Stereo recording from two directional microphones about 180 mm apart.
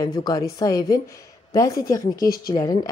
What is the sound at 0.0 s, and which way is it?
Speech, 20° left (ahead or behind).